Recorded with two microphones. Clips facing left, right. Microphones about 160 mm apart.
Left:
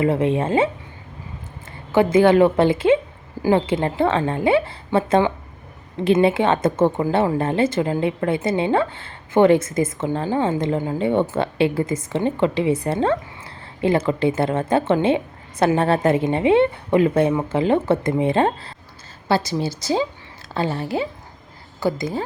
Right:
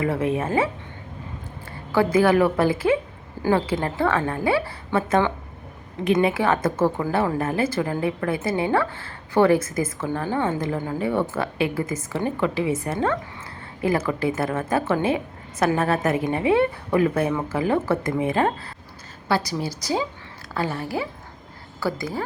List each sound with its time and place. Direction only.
0.0 s a woman's voice: 25° left (ahead or behind)
2.1 s a woman's voice: 25° left (ahead or behind)
3.4 s a woman's voice: 10° left (ahead or behind)
3.8 s a woman's voice: 20° left (ahead or behind)